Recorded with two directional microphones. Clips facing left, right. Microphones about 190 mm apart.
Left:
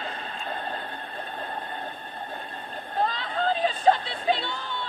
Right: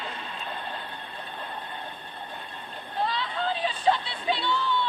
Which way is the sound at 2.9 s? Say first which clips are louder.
Left 2 dB; 45° left (ahead or behind).